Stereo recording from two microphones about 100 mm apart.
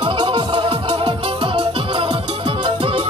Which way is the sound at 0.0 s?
55° right (ahead or behind).